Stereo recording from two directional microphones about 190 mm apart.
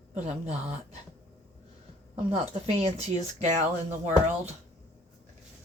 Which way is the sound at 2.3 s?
35° right (ahead or behind).